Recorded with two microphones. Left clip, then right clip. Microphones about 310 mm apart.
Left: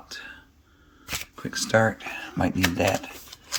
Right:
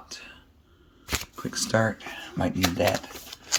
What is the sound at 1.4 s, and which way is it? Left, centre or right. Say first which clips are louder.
Speech: left 4 dB; centre.